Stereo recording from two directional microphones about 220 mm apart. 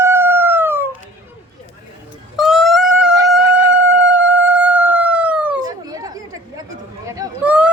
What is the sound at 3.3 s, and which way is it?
Chicken, 5° right (ahead or behind).